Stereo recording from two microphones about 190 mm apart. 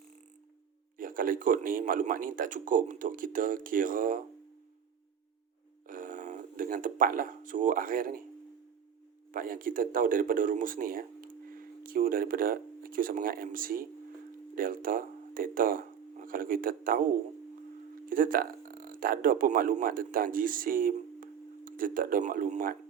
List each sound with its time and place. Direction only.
0.9 s speech: 45° right (ahead or behind)
5.9 s speech: 45° right (ahead or behind)
9.3 s speech: 45° right (ahead or behind)
18.1 s speech: 45° right (ahead or behind)